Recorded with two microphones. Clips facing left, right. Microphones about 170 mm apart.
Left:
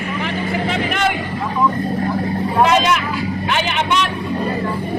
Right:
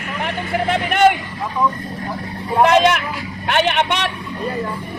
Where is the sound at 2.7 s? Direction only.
55° right (ahead or behind).